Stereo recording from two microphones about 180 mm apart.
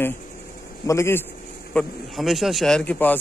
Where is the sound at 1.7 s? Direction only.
Centre (ahead or behind).